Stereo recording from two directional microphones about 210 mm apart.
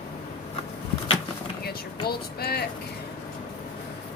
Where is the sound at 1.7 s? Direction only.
50° left (ahead or behind).